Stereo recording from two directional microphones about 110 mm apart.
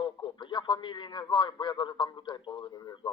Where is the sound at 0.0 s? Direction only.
45° left (ahead or behind).